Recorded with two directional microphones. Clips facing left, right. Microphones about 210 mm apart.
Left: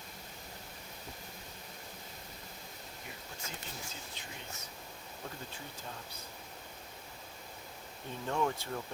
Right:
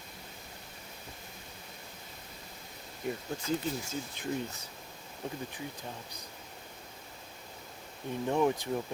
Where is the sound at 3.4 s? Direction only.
35° right (ahead or behind).